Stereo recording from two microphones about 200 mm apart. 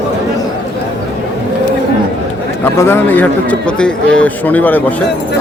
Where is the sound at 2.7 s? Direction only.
10° left (ahead or behind).